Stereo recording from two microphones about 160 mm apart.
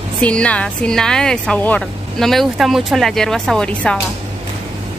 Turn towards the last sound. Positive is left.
turn(degrees=5)  # may be behind; listen again after turning